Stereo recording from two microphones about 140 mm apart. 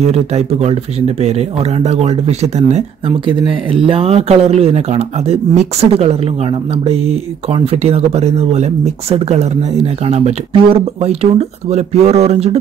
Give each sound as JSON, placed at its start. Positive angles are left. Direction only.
{"t": 0.0, "sound": "speech", "side_deg": -50}
{"t": 3.3, "sound": "speech", "side_deg": -40}